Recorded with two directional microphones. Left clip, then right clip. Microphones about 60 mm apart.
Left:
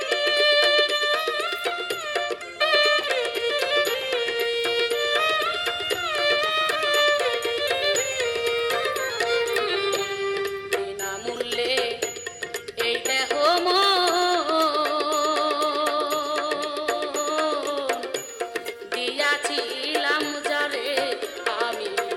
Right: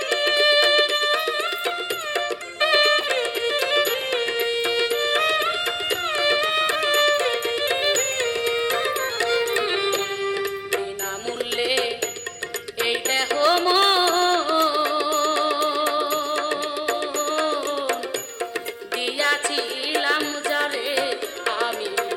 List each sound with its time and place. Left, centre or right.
0.1 s music: right
19.2 s music: right